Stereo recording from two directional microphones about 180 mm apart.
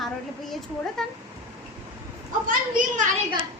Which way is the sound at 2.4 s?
45° right (ahead or behind).